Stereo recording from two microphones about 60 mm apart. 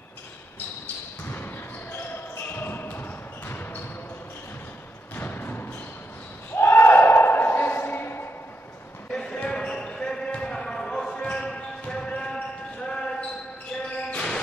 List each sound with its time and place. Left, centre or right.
1.3 s basketball bounce: left
5.1 s music: left
6.5 s a sound: left
9.1 s a sound: centre
9.5 s basketball bounce: centre
14.1 s music: centre